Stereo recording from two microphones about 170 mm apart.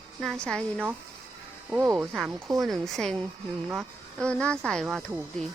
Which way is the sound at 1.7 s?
20° right (ahead or behind).